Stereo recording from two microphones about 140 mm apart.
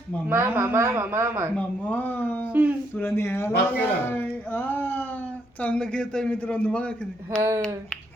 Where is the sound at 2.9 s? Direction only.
15° left (ahead or behind).